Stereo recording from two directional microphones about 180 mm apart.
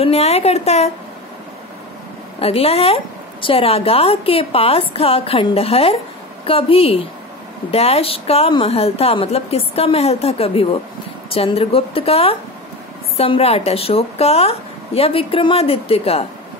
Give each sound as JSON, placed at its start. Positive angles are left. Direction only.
{"t": 0.0, "sound": "speech", "side_deg": 35}
{"t": 2.4, "sound": "speech", "side_deg": 35}